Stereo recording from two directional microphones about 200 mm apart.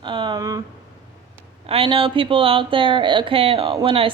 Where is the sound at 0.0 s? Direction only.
25° right (ahead or behind).